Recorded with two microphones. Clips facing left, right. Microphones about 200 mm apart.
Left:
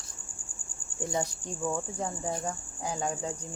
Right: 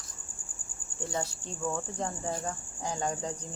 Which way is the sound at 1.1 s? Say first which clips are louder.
Left 3 dB; 20° left (ahead or behind).